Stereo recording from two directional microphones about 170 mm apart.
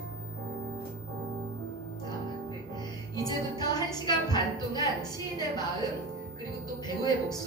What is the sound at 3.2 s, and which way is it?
Music, 25° left (ahead or behind).